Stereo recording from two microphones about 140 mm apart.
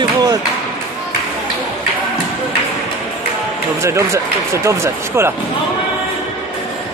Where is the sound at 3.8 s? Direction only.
20° right (ahead or behind).